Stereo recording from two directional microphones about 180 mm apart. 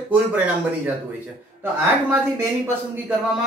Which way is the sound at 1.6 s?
15° right (ahead or behind).